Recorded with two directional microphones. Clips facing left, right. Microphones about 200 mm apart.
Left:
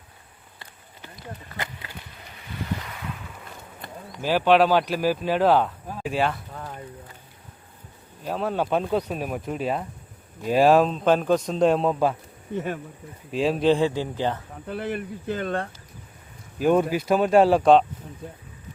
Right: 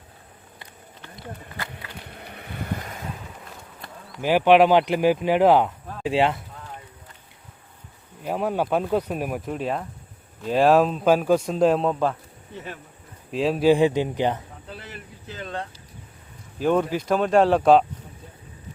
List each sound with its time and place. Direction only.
1.5 s a sound: 20° left (ahead or behind)
2.0 s vehicle: 60° right (ahead or behind); by 3.1 s 45° right (ahead or behind)
3.8 s a sound: centre (ahead or behind)
4.2 s speech: 15° right (ahead or behind)
8.2 s a man's voice: 15° right (ahead or behind); by 12.1 s 5° left (ahead or behind)
12.5 s speech: 50° left (ahead or behind)
13.3 s a man's voice: centre (ahead or behind)
13.7 s speech: 15° right (ahead or behind)
14.7 s speech: 55° left (ahead or behind)
16.6 s speech: 10° left (ahead or behind)